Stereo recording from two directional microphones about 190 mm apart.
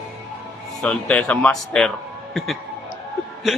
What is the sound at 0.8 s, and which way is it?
A man's voice, 5° left (ahead or behind).